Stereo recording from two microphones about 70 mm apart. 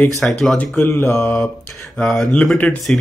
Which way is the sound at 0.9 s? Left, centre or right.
Left.